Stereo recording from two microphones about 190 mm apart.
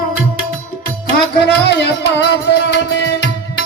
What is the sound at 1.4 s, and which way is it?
Music, 60° left (ahead or behind).